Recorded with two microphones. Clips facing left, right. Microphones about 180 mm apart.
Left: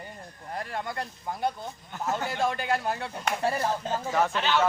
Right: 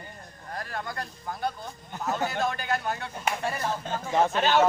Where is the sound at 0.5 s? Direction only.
25° left (ahead or behind).